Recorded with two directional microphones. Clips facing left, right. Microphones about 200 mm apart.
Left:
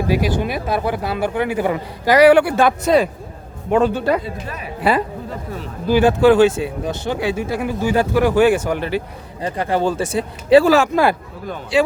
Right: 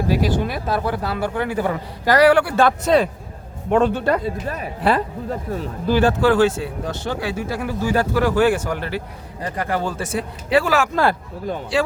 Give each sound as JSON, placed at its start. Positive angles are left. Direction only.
{"t": 0.1, "sound": "speech", "side_deg": 15}
{"t": 4.2, "sound": "speech", "side_deg": -45}
{"t": 4.8, "sound": "speech", "side_deg": 10}
{"t": 10.9, "sound": "speech", "side_deg": 15}